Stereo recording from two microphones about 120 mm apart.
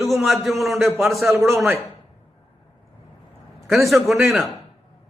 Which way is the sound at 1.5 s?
20° right (ahead or behind).